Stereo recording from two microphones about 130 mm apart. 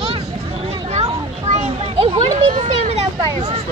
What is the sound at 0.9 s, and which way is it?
Children playing, 55° right (ahead or behind).